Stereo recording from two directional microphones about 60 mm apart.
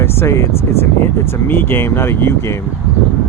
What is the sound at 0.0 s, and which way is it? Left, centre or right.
Speech, left.